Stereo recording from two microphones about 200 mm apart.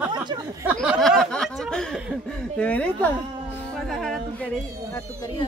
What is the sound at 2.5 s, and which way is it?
Speech, 5° left (ahead or behind).